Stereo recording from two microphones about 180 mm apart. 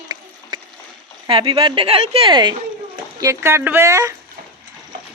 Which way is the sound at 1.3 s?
30° right (ahead or behind).